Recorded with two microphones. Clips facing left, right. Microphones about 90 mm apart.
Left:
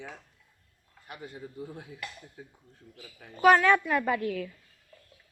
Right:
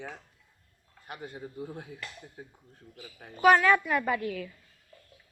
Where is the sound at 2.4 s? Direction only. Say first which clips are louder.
Right 1 dB; 40° right (ahead or behind).